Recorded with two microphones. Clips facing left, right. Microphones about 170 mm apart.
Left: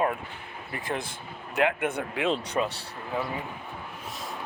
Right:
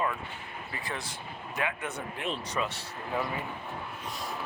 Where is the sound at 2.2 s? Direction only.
75° left (ahead or behind).